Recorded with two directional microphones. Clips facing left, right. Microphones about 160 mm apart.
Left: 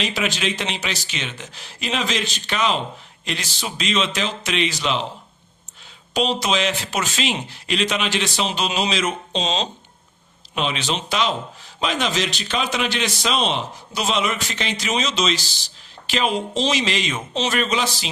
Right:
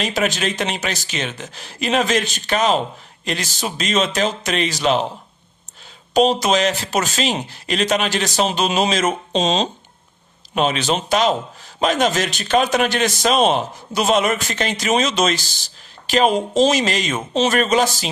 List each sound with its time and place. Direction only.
0.0 s a man's voice: 45° right (ahead or behind)
6.1 s a man's voice: 45° right (ahead or behind)